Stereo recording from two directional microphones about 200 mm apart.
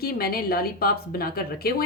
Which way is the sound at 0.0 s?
50° left (ahead or behind).